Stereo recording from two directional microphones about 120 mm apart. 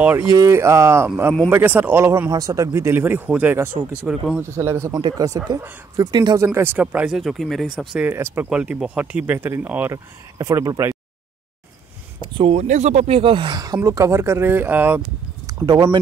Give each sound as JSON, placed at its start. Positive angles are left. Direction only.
{"t": 0.3, "sound": "speech", "side_deg": -25}
{"t": 4.9, "sound": "speech", "side_deg": -35}
{"t": 6.4, "sound": "speech", "side_deg": -20}
{"t": 7.2, "sound": "speech", "side_deg": 0}
{"t": 8.1, "sound": "speech", "side_deg": -20}
{"t": 8.5, "sound": "speech", "side_deg": -10}
{"t": 10.3, "sound": "speech", "side_deg": -30}
{"t": 12.4, "sound": "speech", "side_deg": -60}
{"t": 13.7, "sound": "speech", "side_deg": -25}
{"t": 15.4, "sound": "a sound", "side_deg": -35}